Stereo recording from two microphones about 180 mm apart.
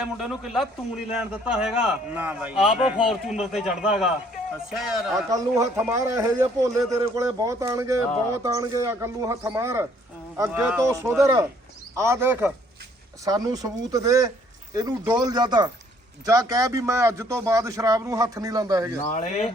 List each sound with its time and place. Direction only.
0.0 s a man's voice: 5° right (ahead or behind)
5.3 s speech: 20° right (ahead or behind)
19.1 s speech: 40° left (ahead or behind)